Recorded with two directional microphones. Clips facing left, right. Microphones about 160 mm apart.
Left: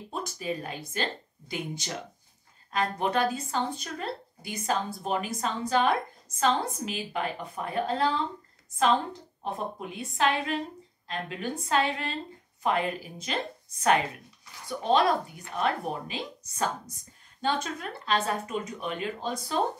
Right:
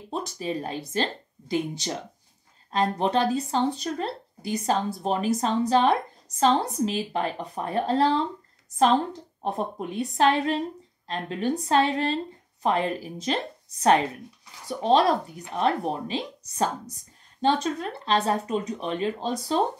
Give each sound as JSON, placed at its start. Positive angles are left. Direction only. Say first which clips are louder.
{"t": 0.1, "sound": "speech", "louder": "right 4 dB", "side_deg": -30}
{"t": 9.4, "sound": "speech", "louder": "right 5 dB", "side_deg": -40}